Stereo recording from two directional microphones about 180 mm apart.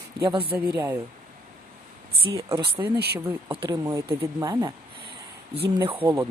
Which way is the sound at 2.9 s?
65° right (ahead or behind).